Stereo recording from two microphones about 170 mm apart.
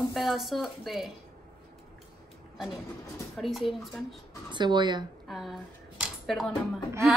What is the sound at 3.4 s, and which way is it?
Speech, centre (ahead or behind).